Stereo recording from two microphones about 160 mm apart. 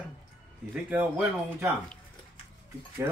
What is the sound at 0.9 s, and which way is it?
Speech, 10° right (ahead or behind).